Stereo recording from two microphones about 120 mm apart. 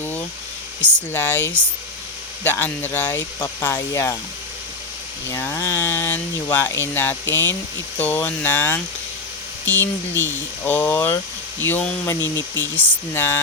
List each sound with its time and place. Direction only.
0.0 s a sound: 15° left (ahead or behind)
0.8 s speech: 15° left (ahead or behind)
5.3 s speech: 15° left (ahead or behind)